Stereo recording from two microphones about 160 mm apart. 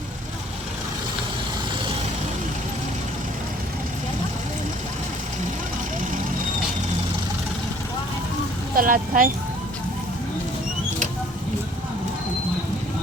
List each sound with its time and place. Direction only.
8.7 s speech: 60° right (ahead or behind)